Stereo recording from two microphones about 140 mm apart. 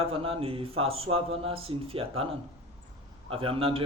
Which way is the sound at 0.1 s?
40° right (ahead or behind).